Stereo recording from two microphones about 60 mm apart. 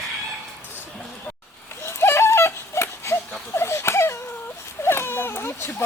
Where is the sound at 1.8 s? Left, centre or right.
Left.